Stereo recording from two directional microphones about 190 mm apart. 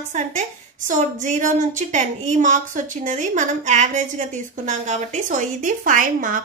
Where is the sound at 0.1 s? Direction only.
40° right (ahead or behind).